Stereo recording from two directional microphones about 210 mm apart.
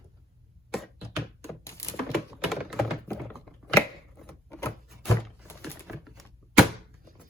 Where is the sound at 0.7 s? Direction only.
Centre (ahead or behind).